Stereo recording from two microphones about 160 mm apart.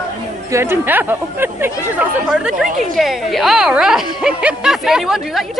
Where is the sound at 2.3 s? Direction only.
Centre (ahead or behind).